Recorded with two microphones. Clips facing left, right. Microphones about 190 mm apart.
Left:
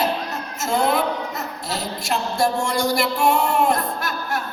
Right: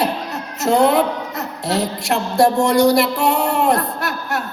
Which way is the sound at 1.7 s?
70° right (ahead or behind).